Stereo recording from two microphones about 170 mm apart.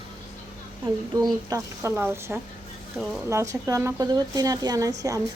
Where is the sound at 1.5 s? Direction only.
15° right (ahead or behind).